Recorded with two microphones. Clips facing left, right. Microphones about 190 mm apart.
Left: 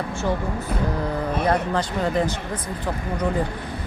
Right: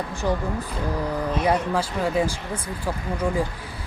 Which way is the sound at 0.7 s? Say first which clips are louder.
Left 5 dB; 55° left (ahead or behind).